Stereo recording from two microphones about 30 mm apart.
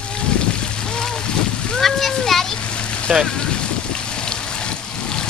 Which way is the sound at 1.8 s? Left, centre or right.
Centre.